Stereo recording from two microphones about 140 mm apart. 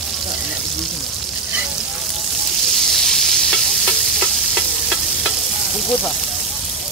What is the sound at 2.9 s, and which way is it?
Stir, centre (ahead or behind).